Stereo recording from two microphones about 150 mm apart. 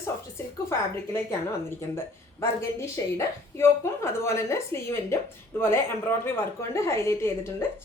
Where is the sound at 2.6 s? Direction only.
20° left (ahead or behind).